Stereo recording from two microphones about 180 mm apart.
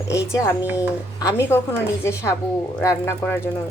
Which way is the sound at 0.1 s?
15° left (ahead or behind).